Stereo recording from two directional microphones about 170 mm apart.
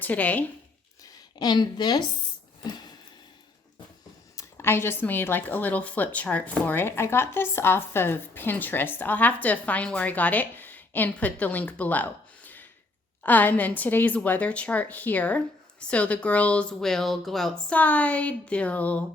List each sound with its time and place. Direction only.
0.0 s speech: 10° left (ahead or behind)
1.0 s a woman's voice: 25° left (ahead or behind)
2.6 s a sound: 25° left (ahead or behind)
4.4 s speech: 15° left (ahead or behind)